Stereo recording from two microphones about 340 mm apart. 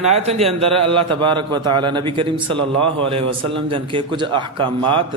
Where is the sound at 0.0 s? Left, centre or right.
Centre.